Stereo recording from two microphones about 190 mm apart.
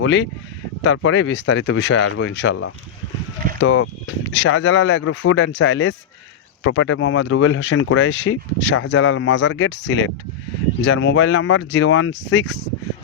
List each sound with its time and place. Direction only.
0.0 s speech: 70° left (ahead or behind)
6.7 s speech: 90° left